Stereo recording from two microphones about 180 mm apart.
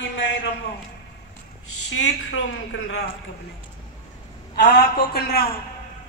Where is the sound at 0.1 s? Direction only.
90° left.